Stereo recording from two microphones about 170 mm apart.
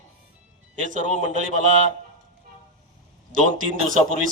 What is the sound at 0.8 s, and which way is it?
Speech, 50° right (ahead or behind).